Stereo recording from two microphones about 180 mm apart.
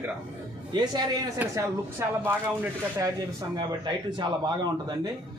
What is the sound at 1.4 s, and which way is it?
A man's voice, 15° right (ahead or behind).